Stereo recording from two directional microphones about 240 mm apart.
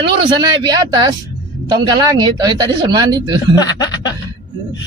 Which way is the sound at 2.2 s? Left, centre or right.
Centre.